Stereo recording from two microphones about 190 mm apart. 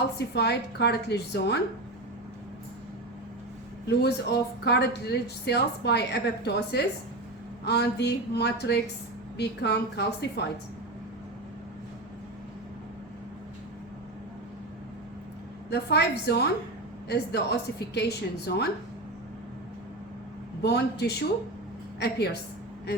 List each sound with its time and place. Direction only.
0.2 s speech: 60° left (ahead or behind)
3.8 s speech: 60° left (ahead or behind)
15.7 s speech: 60° left (ahead or behind)
20.6 s a woman's voice: 60° left (ahead or behind)